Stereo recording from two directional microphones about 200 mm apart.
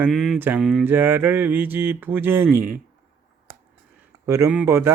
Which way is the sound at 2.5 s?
50° right (ahead or behind).